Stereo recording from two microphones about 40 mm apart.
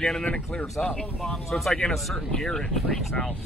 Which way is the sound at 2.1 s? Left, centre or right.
Centre.